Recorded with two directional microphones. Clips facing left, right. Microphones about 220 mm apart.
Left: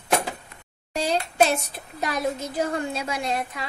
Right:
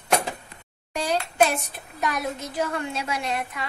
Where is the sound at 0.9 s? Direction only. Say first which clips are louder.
Left 1 dB; 25° left (ahead or behind).